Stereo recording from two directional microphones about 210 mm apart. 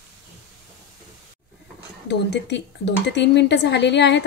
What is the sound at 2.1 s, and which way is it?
Speech, 55° left (ahead or behind).